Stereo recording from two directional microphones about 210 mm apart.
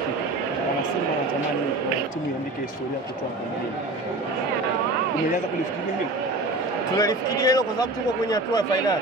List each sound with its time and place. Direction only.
7.0 s speech: 15° left (ahead or behind)